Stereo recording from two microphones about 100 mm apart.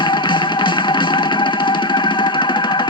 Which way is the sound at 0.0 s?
50° left (ahead or behind).